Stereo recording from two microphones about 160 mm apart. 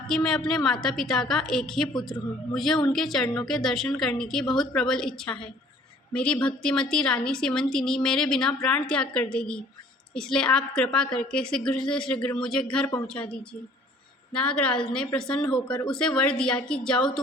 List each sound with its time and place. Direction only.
0.1 s a woman's voice: 5° left (ahead or behind)
14.3 s a woman's voice: 5° left (ahead or behind)
15.6 s speech: 30° left (ahead or behind)
15.9 s a woman's voice: 5° left (ahead or behind)